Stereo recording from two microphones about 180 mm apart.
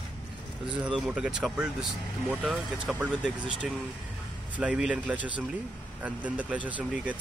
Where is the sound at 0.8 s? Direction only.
5° right (ahead or behind).